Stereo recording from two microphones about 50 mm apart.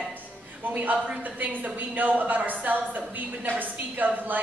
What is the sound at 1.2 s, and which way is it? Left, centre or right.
A woman's voice, right.